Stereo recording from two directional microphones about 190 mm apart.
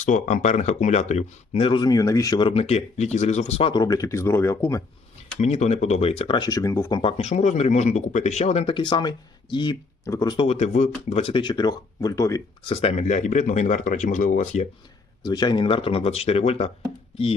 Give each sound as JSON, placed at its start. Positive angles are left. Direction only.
{"t": 0.0, "sound": "speech", "side_deg": 40}
{"t": 3.7, "sound": "speech", "side_deg": 20}
{"t": 5.4, "sound": "speech", "side_deg": 35}
{"t": 7.0, "sound": "speech", "side_deg": 30}
{"t": 12.6, "sound": "speech", "side_deg": 30}
{"t": 15.2, "sound": "speech", "side_deg": 20}